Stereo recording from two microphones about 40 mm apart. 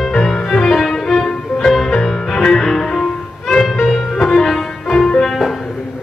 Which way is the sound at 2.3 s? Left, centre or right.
Centre.